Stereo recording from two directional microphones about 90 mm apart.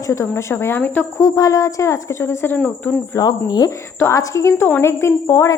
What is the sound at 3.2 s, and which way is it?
Speech, 45° left (ahead or behind).